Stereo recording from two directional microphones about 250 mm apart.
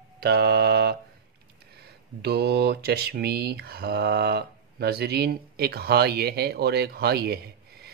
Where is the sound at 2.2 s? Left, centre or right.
Right.